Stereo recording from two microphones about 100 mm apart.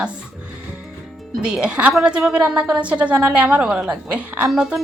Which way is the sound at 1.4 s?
10° right (ahead or behind).